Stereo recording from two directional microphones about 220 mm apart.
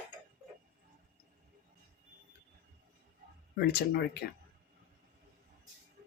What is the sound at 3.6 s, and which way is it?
Speech, 45° left (ahead or behind).